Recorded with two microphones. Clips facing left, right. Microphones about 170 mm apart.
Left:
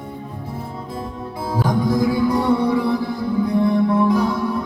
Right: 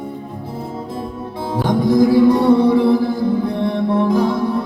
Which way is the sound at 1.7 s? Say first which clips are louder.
Right 6 dB; 25° right (ahead or behind).